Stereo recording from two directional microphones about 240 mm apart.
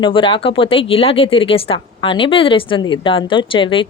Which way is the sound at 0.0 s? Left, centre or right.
Left.